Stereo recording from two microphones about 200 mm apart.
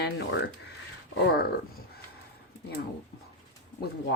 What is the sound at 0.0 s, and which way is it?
Speech, 60° left (ahead or behind).